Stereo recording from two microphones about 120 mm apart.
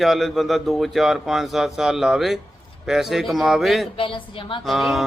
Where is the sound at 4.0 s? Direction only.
45° left (ahead or behind).